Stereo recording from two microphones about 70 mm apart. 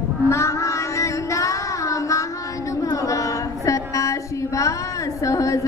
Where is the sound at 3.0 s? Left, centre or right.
Left.